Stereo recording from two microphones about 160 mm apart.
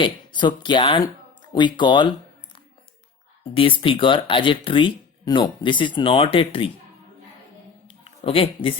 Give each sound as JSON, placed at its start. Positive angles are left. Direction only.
{"t": 0.0, "sound": "speech", "side_deg": 30}
{"t": 3.5, "sound": "speech", "side_deg": 35}
{"t": 7.9, "sound": "a sound", "side_deg": 35}